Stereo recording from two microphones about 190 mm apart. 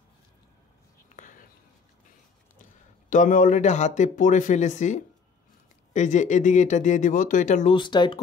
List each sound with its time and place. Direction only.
1.0 s a sound: 45° left (ahead or behind)
2.6 s speech: 40° left (ahead or behind)
7.7 s speech: 25° left (ahead or behind)